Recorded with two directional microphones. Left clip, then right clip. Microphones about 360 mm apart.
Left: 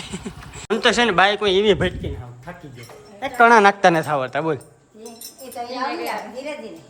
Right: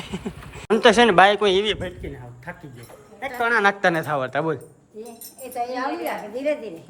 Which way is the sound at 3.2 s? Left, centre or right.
Centre.